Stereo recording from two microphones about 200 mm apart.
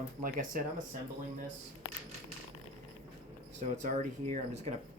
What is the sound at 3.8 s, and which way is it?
Speech, 35° right (ahead or behind).